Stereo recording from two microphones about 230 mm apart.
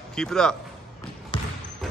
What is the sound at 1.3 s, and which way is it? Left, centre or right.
Basketball bounce, left.